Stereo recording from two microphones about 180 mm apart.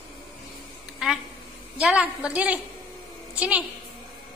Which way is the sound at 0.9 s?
Centre (ahead or behind).